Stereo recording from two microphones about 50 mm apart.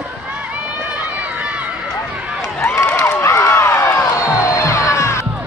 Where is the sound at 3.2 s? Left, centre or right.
Left.